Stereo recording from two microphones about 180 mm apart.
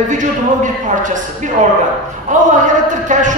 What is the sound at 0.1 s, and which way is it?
A woman's voice, 45° right (ahead or behind).